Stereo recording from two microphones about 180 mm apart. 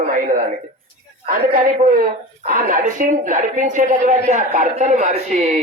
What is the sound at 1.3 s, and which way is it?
A woman's voice, 50° right (ahead or behind).